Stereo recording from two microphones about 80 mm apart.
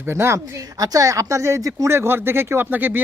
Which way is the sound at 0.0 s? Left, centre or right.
Right.